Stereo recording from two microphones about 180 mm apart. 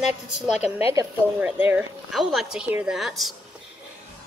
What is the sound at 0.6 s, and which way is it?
Speech, 35° left (ahead or behind).